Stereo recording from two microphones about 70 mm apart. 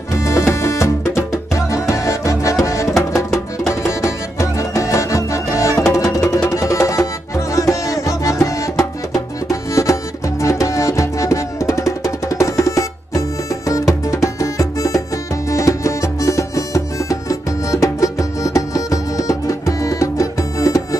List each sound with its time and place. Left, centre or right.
0.1 s music: left